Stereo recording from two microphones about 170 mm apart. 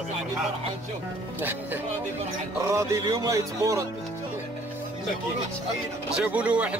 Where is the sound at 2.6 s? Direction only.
15° right (ahead or behind).